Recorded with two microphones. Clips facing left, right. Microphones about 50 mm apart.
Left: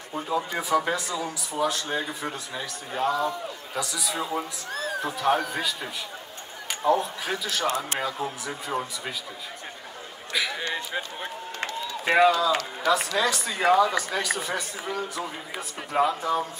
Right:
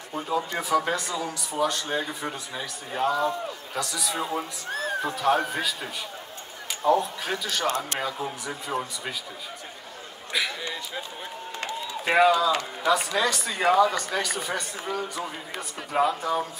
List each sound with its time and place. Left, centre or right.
0.1 s speech: centre
4.6 s speech: right
5.0 s speech: centre
7.6 s speech: left
8.0 s speech: centre
10.6 s a sound: left
12.0 s speech: centre